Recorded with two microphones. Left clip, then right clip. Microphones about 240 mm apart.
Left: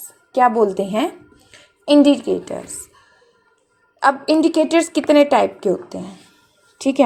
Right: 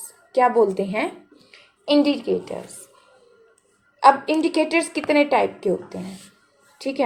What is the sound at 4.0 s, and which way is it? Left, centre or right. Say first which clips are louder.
A woman's voice: even; left.